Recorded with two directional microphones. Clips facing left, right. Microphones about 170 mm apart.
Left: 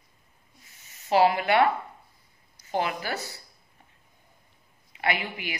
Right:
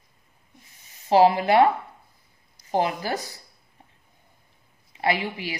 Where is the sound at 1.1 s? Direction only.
35° right (ahead or behind).